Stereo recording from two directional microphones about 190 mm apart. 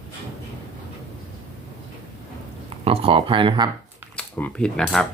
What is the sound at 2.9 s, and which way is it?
Speech, 30° right (ahead or behind).